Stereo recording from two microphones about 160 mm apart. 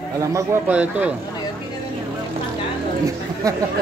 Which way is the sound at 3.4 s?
20° right (ahead or behind).